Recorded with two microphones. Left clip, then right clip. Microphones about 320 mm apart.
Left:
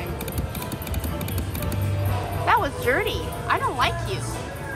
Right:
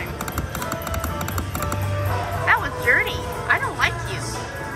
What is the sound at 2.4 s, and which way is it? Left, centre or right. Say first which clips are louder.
Music: right 2 dB; centre.